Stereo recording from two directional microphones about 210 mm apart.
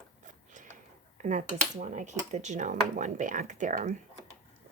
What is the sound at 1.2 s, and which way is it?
Speech, 35° right (ahead or behind).